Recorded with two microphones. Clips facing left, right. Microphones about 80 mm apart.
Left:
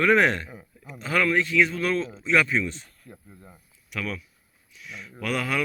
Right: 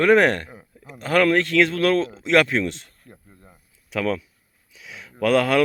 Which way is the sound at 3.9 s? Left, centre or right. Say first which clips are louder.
Right 8 dB; right.